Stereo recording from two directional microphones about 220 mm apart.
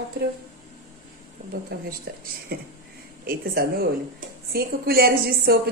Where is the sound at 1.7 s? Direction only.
45° right (ahead or behind).